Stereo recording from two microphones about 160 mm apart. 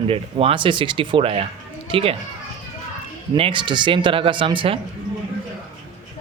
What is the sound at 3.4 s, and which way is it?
Speech, 35° right (ahead or behind).